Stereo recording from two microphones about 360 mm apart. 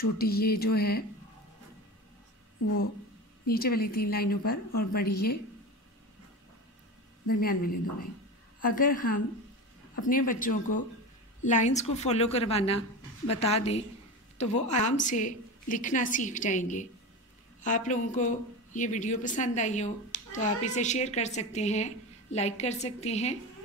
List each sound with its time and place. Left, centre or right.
0.0 s speech: left
3.4 s speech: left
7.3 s a woman's voice: left